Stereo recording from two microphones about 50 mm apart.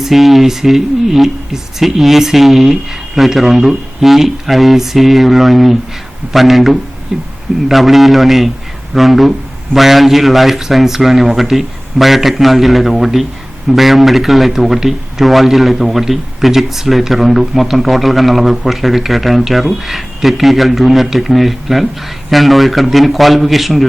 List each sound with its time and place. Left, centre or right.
0.0 s a man's voice: centre
7.1 s speech: centre
7.7 s a man's voice: centre